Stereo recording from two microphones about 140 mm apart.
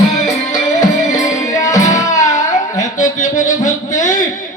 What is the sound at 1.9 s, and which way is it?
Music, 25° left (ahead or behind).